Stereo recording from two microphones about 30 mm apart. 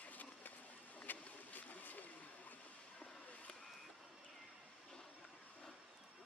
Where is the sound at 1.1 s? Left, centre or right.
Left.